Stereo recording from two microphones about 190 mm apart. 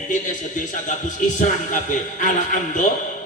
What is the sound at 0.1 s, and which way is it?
Speech, 40° left (ahead or behind).